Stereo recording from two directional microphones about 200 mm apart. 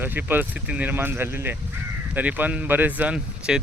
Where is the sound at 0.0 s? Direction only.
10° right (ahead or behind).